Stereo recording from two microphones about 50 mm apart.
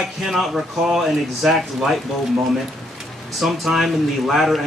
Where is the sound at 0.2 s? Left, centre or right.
Centre.